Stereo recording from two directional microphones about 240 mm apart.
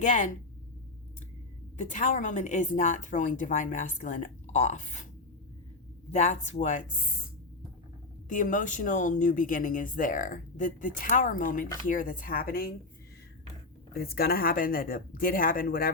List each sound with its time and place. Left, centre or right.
0.0 s speech: left
1.8 s speech: left
6.1 s speech: left
8.3 s speech: left
13.9 s speech: left